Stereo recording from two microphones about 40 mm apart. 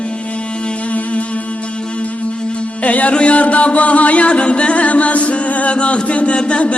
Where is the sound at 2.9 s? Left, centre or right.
Left.